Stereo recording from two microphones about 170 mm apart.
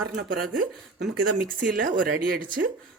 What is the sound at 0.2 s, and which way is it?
Speech, 65° right (ahead or behind).